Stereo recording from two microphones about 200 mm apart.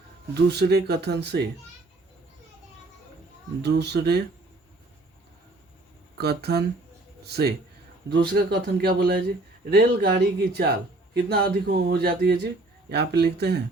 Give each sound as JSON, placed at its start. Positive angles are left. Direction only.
{"t": 0.3, "sound": "speech", "side_deg": -55}
{"t": 3.6, "sound": "speech", "side_deg": -55}
{"t": 6.1, "sound": "a man's voice", "side_deg": -50}